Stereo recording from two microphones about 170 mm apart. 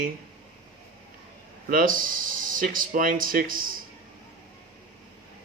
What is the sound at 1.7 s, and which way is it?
Speech, 55° right (ahead or behind).